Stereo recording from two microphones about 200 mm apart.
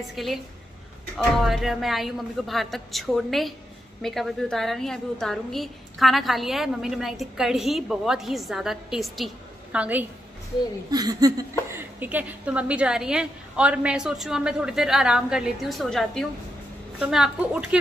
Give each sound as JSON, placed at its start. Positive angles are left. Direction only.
{"t": 0.0, "sound": "a woman's voice", "side_deg": 0}
{"t": 10.9, "sound": "a woman's voice", "side_deg": -20}